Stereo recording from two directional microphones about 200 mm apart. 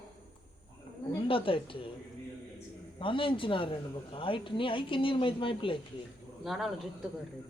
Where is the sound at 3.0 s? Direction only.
25° left (ahead or behind).